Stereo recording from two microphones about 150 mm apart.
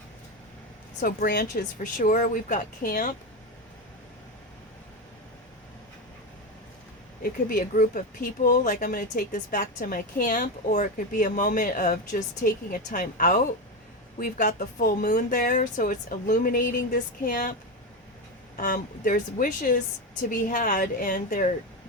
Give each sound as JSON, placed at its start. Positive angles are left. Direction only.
{"t": 1.0, "sound": "a woman's voice", "side_deg": 85}
{"t": 2.0, "sound": "speech", "side_deg": 60}
{"t": 7.2, "sound": "speech", "side_deg": 70}
{"t": 18.5, "sound": "speech", "side_deg": 65}